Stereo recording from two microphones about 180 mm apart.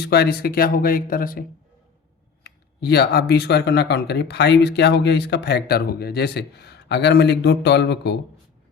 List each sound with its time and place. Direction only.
0.0 s speech: 65° left (ahead or behind)
2.4 s speech: 65° left (ahead or behind)